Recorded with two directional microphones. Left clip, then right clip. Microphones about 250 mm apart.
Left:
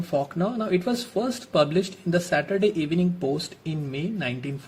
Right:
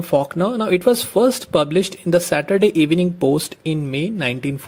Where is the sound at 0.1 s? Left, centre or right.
Right.